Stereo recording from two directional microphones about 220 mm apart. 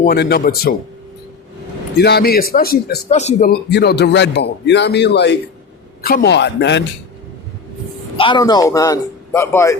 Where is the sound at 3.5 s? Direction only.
50° left (ahead or behind).